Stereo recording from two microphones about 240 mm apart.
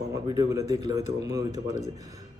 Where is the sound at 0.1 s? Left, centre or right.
Centre.